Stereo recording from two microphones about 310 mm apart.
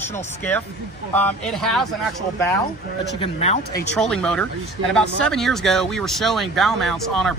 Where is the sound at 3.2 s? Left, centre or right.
Centre.